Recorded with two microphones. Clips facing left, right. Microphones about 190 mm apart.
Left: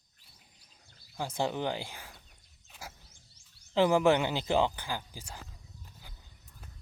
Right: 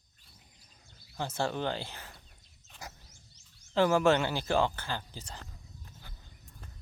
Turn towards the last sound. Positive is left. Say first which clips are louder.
# right 1 dB
turn(degrees=10)  # may be behind; listen again after turning